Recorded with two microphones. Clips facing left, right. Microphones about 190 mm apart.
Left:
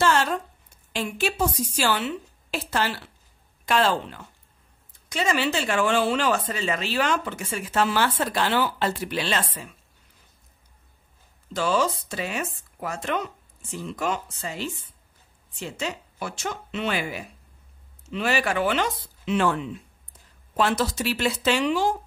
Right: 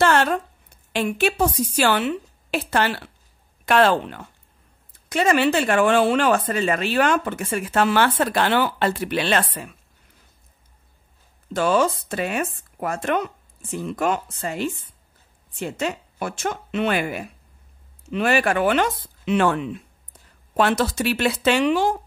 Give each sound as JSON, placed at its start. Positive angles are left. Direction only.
{"t": 0.0, "sound": "a sound", "side_deg": -60}
{"t": 0.9, "sound": "speech", "side_deg": -60}
{"t": 11.5, "sound": "speech", "side_deg": -55}